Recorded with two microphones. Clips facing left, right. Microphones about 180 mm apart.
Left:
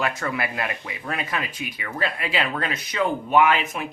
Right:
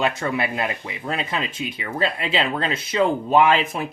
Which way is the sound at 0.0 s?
25° right (ahead or behind).